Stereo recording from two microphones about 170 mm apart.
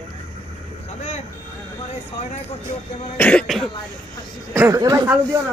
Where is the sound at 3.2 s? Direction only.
5° left (ahead or behind).